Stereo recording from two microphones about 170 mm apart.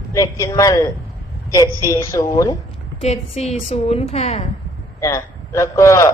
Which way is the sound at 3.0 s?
40° left (ahead or behind).